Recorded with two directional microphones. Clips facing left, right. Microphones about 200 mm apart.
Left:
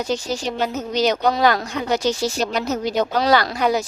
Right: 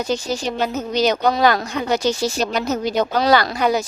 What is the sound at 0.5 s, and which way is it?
Speech, 60° right (ahead or behind).